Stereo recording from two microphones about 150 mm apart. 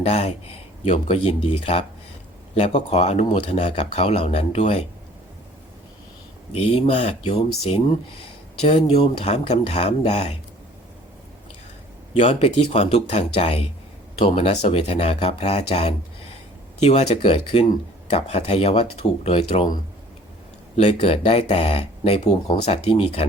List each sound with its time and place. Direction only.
0.0 s speech: 45° left (ahead or behind)
6.5 s speech: 40° left (ahead or behind)
12.1 s speech: 40° left (ahead or behind)
20.7 s speech: 40° left (ahead or behind)